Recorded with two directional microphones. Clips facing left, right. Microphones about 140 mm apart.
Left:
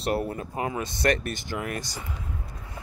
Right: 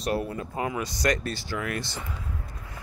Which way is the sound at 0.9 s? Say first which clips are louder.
Left 3 dB; 55° left (ahead or behind).